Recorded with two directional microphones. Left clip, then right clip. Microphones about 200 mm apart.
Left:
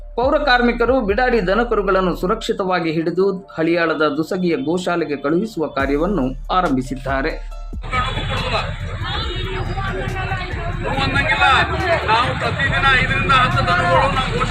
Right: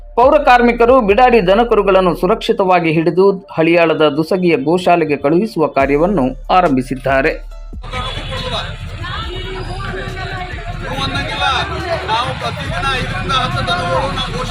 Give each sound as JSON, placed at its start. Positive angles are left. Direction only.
{"t": 0.2, "sound": "a man's voice", "side_deg": -20}
{"t": 11.0, "sound": "vehicle", "side_deg": -5}
{"t": 12.9, "sound": "speech", "side_deg": 0}